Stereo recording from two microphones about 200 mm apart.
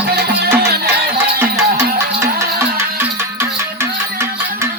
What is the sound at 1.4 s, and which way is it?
Music, 15° right (ahead or behind).